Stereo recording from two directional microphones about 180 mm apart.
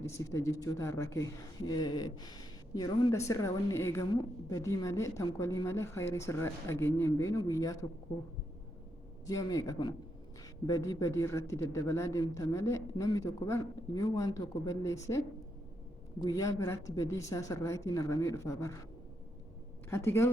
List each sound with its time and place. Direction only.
0.3 s a woman's voice: 15° left (ahead or behind)
9.2 s a woman's voice: 20° left (ahead or behind)
16.2 s a woman's voice: 20° left (ahead or behind)
19.9 s a woman's voice: 15° left (ahead or behind)